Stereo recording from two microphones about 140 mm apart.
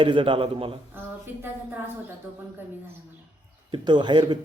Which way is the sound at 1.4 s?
15° right (ahead or behind).